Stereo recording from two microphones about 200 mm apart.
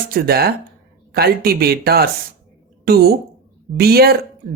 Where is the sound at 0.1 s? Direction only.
50° right (ahead or behind).